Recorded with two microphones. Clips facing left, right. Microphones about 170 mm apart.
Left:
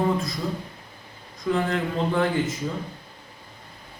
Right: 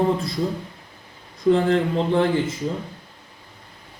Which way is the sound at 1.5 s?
30° right (ahead or behind).